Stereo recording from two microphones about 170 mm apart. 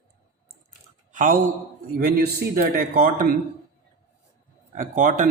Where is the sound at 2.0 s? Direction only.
65° right (ahead or behind).